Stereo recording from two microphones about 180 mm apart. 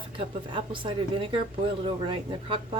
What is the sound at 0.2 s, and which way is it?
Speech, 30° right (ahead or behind).